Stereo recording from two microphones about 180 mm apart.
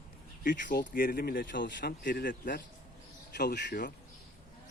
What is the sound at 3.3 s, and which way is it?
Speech, 65° left (ahead or behind).